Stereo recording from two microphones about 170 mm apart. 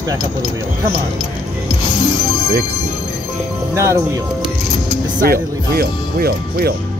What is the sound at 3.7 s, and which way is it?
Speech, 15° right (ahead or behind).